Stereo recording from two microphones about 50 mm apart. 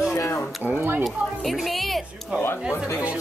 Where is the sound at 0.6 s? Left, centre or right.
Right.